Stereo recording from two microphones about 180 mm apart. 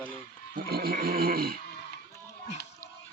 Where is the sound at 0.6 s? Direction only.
55° right (ahead or behind).